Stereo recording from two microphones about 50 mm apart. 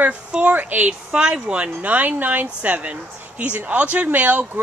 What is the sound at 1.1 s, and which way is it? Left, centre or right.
Speech, right.